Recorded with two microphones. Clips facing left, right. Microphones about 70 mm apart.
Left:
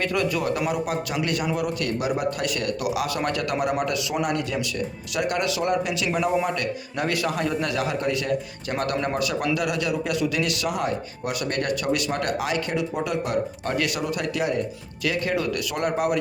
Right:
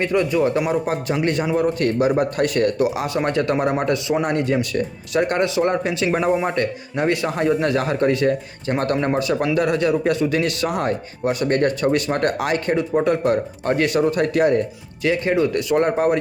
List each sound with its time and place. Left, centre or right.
0.0 s a man's voice: right
15.0 s speech: right